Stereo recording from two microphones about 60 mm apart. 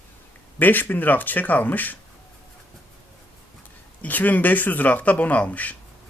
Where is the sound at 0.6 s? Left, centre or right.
Left.